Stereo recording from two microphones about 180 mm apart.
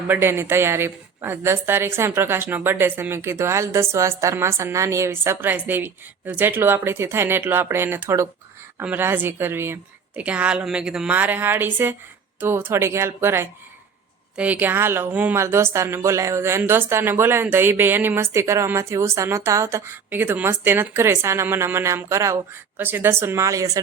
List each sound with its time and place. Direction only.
0.1 s a woman's voice: 10° right (ahead or behind)